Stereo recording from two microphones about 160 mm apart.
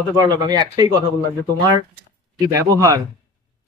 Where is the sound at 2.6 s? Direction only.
20° right (ahead or behind).